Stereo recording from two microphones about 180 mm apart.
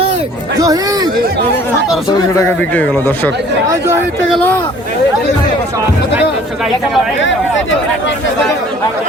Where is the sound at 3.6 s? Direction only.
15° right (ahead or behind).